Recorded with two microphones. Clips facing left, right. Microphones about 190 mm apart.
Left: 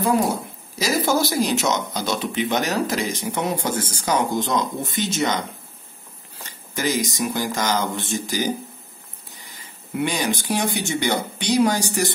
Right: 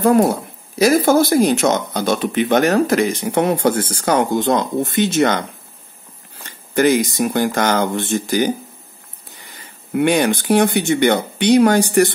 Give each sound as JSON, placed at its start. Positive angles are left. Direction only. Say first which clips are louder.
{"t": 0.0, "sound": "speech", "louder": "right 7 dB", "side_deg": -55}
{"t": 6.7, "sound": "speech", "louder": "right 9 dB", "side_deg": -60}
{"t": 9.9, "sound": "speech", "louder": "right 8 dB", "side_deg": -60}